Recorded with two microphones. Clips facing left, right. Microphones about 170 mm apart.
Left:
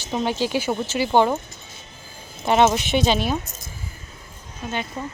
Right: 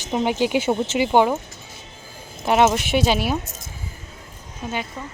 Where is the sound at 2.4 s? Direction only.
10° right (ahead or behind).